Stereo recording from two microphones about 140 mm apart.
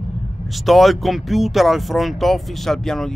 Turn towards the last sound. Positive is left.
turn(degrees=5)  # may be behind; listen again after turning